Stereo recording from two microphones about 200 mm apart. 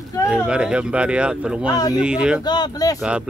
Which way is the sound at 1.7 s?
20° left (ahead or behind).